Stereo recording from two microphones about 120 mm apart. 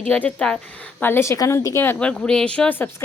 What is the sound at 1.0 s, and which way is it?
A woman's voice, 20° left (ahead or behind).